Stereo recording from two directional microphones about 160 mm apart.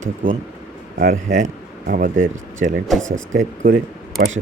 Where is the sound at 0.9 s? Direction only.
60° right (ahead or behind).